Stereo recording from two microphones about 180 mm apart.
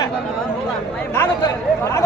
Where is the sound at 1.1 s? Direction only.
15° left (ahead or behind).